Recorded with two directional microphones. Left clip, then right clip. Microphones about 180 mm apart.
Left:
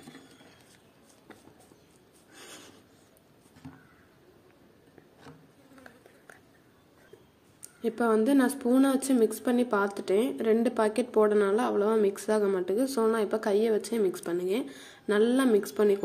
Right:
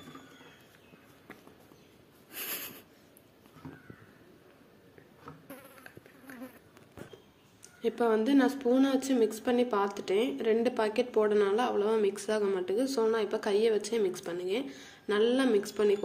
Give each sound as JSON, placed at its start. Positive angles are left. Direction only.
{"t": 7.8, "sound": "a woman's voice", "side_deg": 40}